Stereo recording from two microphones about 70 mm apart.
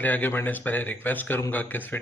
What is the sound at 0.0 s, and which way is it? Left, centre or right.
Speech, left.